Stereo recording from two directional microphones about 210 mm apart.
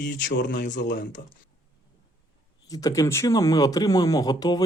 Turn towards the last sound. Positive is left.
turn(degrees=20)  # may be behind; listen again after turning